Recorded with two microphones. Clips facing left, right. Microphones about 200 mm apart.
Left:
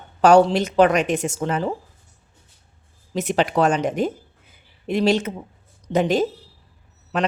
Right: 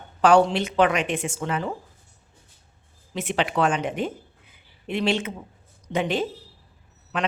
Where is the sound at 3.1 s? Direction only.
40° left (ahead or behind).